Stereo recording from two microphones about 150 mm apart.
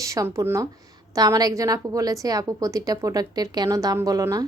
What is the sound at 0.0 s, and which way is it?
A woman's voice, 20° right (ahead or behind).